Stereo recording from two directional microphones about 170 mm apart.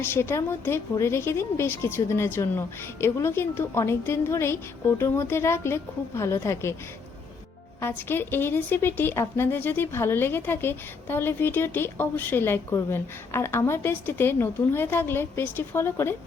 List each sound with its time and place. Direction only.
0.0 s a woman's voice: 15° left (ahead or behind)
7.8 s a woman's voice: 15° left (ahead or behind)